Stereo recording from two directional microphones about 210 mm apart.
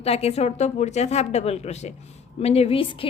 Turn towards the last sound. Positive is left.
turn(degrees=25)  # may be behind; listen again after turning